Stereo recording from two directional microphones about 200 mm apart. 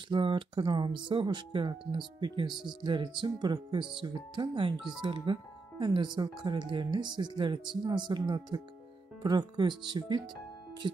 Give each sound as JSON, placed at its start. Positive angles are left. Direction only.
{"t": 0.1, "sound": "speech", "side_deg": -25}